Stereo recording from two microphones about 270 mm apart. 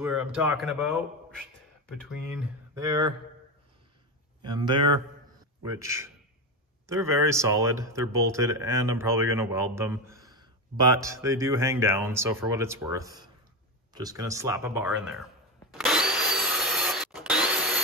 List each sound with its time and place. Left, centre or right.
0.0 s a man's voice: centre
4.4 s speech: centre
15.7 s drill: centre